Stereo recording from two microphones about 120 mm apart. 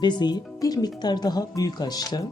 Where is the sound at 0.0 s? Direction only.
40° left (ahead or behind).